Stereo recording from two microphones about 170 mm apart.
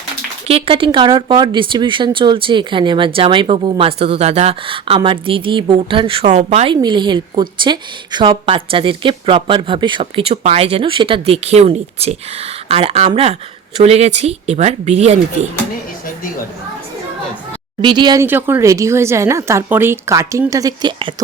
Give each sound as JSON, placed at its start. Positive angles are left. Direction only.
{"t": 0.4, "sound": "speech", "side_deg": -35}
{"t": 6.8, "sound": "a woman's voice", "side_deg": -25}
{"t": 17.8, "sound": "a woman's voice", "side_deg": -25}
{"t": 18.2, "sound": "a woman's voice", "side_deg": -15}